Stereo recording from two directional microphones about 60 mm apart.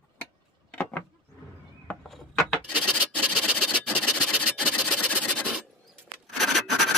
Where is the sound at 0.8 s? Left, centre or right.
Left.